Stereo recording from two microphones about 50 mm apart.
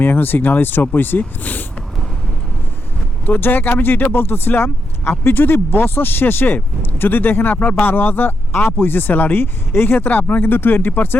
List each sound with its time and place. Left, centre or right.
0.0 s speech: left
3.2 s speech: left